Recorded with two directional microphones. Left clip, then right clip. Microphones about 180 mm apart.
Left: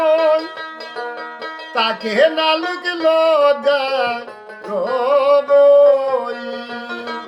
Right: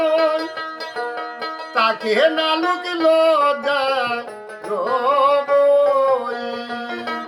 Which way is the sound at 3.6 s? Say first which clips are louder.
Left 3 dB; 20° left (ahead or behind).